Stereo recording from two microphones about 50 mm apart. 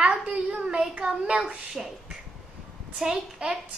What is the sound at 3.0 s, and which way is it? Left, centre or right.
Speech, centre.